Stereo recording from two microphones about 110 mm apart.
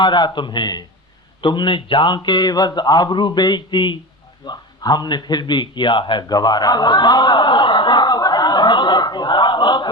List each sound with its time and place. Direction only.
0.0 s a man's voice: 45° left (ahead or behind)